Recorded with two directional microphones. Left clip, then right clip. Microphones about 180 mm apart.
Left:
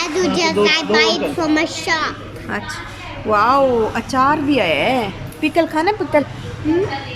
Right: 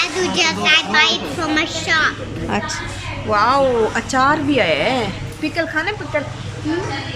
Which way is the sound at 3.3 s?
10° left (ahead or behind).